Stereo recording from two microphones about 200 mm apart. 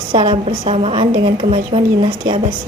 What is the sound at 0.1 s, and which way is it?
A woman's voice, 25° right (ahead or behind).